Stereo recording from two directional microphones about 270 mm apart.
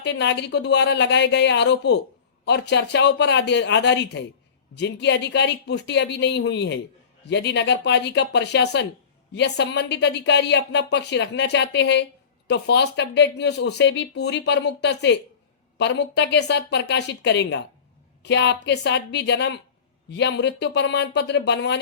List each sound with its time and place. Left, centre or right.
0.0 s speech: left